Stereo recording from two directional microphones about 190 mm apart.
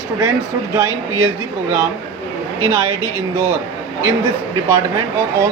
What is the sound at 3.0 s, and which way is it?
Speech, 15° left (ahead or behind).